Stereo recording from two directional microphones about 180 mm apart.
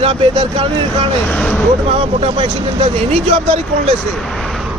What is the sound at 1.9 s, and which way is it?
Speech, 30° right (ahead or behind).